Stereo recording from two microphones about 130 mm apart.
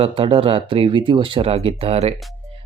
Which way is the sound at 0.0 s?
45° right (ahead or behind).